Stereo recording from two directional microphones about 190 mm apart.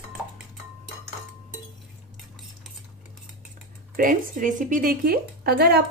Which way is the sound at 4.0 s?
45° right (ahead or behind).